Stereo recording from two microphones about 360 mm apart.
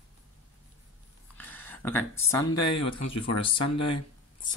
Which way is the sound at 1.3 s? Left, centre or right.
Centre.